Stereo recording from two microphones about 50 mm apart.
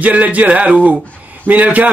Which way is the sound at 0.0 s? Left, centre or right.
Right.